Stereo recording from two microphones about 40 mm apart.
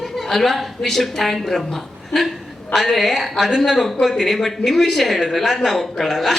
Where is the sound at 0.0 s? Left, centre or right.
Centre.